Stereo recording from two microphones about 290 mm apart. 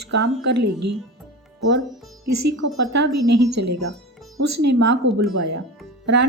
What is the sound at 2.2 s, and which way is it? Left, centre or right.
A woman's voice, right.